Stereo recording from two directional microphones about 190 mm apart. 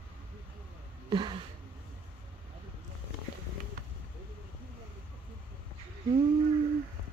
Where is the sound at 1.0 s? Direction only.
25° right (ahead or behind).